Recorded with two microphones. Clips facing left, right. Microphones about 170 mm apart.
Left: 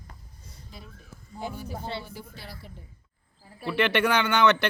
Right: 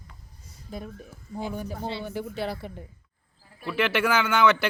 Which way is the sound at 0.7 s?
50° right (ahead or behind).